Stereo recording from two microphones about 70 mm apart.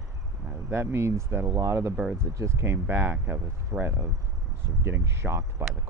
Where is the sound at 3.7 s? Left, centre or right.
Right.